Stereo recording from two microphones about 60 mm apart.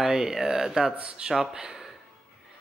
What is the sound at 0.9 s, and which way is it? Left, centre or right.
Speech, right.